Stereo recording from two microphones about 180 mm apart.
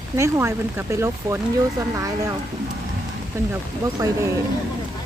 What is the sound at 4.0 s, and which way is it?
Speech, 20° right (ahead or behind).